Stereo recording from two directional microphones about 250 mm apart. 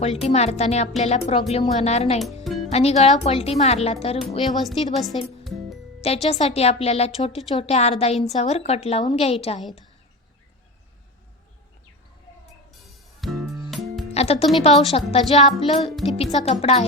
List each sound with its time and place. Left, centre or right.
0.0 s speech: left
2.2 s music: centre
2.7 s speech: left
4.6 s a woman's voice: centre
6.2 s speech: left
12.8 s music: centre
14.1 s speech: left